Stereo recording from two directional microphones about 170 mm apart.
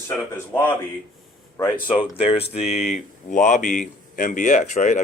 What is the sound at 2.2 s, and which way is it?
Mantra, 35° left (ahead or behind).